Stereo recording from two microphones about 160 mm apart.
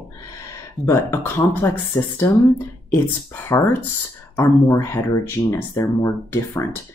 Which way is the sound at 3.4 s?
15° left (ahead or behind).